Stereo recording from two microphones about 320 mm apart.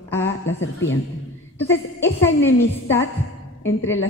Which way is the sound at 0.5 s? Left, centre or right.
Left.